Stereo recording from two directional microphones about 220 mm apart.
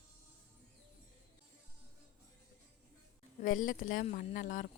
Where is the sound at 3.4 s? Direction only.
35° left (ahead or behind).